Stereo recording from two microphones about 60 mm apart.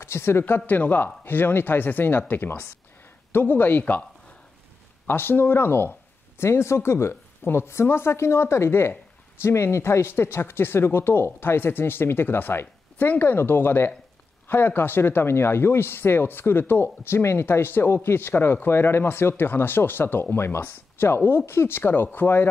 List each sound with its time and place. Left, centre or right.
0.0 s speech: left
0.7 s speech: left
5.0 s speech: left